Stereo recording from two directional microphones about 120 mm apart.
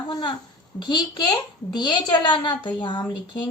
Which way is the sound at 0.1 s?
35° left (ahead or behind).